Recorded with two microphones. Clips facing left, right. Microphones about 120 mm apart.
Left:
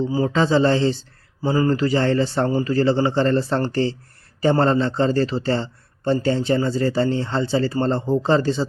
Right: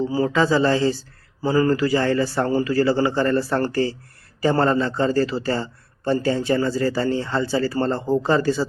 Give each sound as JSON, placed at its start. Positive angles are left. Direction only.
{"t": 0.1, "sound": "speech", "side_deg": 25}